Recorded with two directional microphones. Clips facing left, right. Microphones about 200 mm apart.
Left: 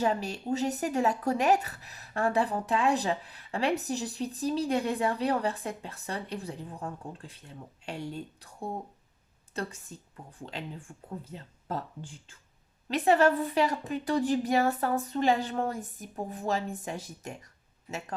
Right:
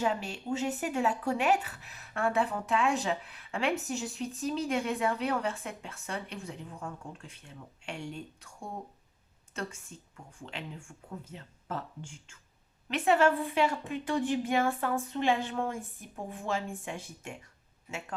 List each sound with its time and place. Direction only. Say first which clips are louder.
0.0 s speech: left 3 dB; 40° left (ahead or behind)